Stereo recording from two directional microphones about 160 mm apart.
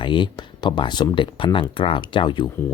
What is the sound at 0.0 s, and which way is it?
Speech, 30° left (ahead or behind).